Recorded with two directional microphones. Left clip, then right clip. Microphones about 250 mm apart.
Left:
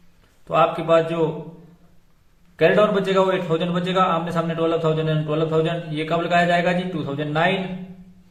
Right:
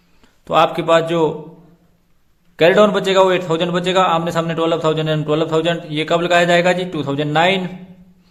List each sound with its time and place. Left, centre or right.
0.4 s a man's voice: right
2.6 s a man's voice: right